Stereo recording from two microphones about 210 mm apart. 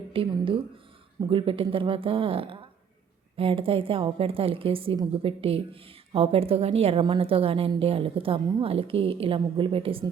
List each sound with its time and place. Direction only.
0.1 s a woman's voice: 25° right (ahead or behind)